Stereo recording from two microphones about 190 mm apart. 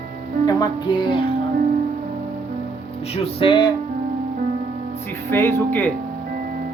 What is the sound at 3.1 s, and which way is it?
Speech, 30° left (ahead or behind).